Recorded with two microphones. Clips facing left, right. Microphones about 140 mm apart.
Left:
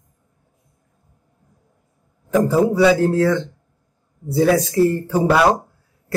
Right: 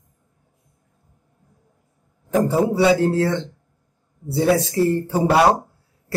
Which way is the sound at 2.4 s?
30° right (ahead or behind).